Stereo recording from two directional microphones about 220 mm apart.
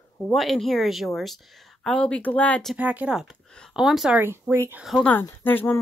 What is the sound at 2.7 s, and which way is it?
A woman's voice, 5° right (ahead or behind).